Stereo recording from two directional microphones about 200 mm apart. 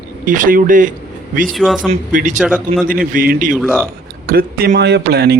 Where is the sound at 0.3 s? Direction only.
40° right (ahead or behind).